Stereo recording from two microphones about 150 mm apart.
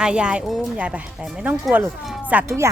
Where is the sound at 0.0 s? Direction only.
5° right (ahead or behind).